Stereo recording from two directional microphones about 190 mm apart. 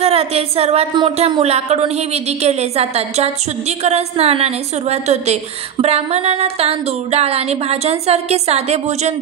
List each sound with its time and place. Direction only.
0.0 s speech: 30° right (ahead or behind)